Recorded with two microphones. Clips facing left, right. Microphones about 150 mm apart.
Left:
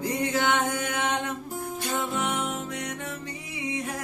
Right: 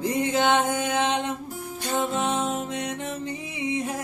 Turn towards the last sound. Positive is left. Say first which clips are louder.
# right 4 dB
turn(degrees=-25)  # may be behind; listen again after turning